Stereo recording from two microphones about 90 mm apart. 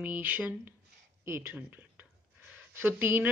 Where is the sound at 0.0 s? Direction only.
20° right (ahead or behind).